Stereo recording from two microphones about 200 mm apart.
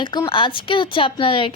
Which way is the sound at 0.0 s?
25° left (ahead or behind).